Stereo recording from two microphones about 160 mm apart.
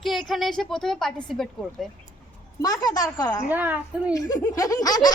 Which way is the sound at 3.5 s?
10° right (ahead or behind).